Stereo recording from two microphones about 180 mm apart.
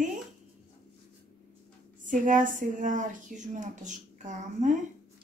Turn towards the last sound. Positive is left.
turn(degrees=-45)  # may be behind; listen again after turning